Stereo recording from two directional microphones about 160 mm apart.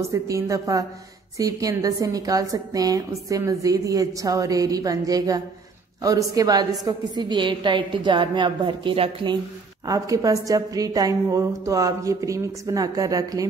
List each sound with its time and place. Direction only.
0.1 s a woman's voice: 20° right (ahead or behind)
9.8 s a woman's voice: 20° right (ahead or behind)